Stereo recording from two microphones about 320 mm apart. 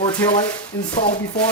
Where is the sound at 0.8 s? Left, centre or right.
Left.